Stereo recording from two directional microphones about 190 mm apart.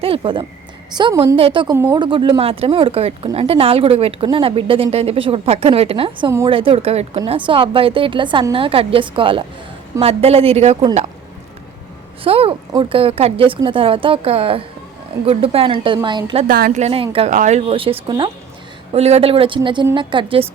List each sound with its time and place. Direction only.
0.0 s a woman's voice: 30° right (ahead or behind)
1.7 s a woman's voice: 15° right (ahead or behind); by 10.8 s 35° right (ahead or behind)
12.2 s a woman's voice: 30° right (ahead or behind)
16.5 s a woman's voice: 50° right (ahead or behind)
16.8 s a woman's voice: 30° right (ahead or behind)